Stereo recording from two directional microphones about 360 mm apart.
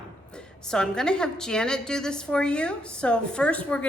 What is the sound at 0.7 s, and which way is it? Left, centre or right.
A woman's voice, centre.